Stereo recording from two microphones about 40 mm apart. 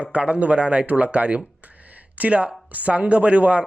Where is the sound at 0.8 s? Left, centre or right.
Right.